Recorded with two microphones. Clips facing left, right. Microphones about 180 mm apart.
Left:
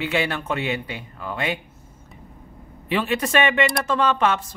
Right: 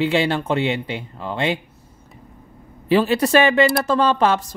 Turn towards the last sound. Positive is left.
turn(degrees=-35)  # may be behind; listen again after turning